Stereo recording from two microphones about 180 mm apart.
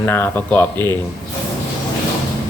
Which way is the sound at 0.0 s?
10° left (ahead or behind).